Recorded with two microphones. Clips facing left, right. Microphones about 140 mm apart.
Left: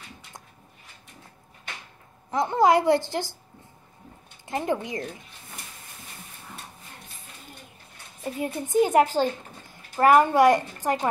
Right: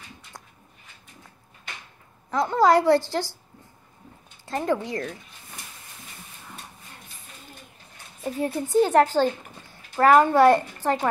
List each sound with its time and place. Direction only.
2.3 s a woman's voice: 20° left (ahead or behind)
4.5 s a woman's voice: 15° left (ahead or behind)
8.6 s a woman's voice: 15° left (ahead or behind)